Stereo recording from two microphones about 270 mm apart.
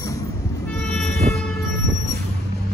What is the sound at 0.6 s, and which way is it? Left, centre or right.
Emergency vehicle, centre.